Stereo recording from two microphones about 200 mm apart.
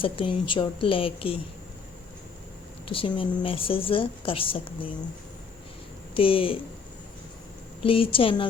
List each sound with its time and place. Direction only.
0.0 s a woman's voice: 25° left (ahead or behind)
2.8 s a woman's voice: 25° left (ahead or behind)
6.1 s a woman's voice: 25° left (ahead or behind)
7.9 s a woman's voice: 25° left (ahead or behind)